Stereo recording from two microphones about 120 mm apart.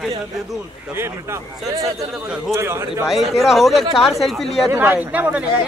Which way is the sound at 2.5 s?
20° right (ahead or behind).